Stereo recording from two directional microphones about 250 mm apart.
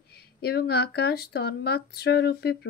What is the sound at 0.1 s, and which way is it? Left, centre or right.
Speech, left.